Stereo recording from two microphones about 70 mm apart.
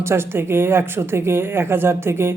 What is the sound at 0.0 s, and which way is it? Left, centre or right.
A man's voice, right.